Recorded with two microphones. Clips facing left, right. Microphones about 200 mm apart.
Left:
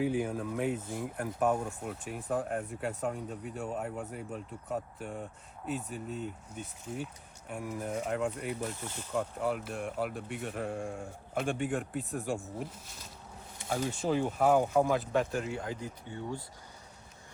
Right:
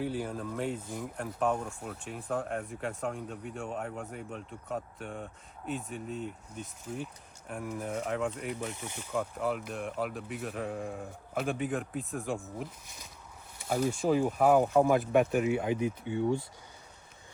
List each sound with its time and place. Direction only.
0.0 s speech: 10° left (ahead or behind)
8.7 s speech: 15° right (ahead or behind); by 12.5 s centre (ahead or behind)
13.7 s speech: 5° right (ahead or behind)
15.1 s speech: 15° right (ahead or behind)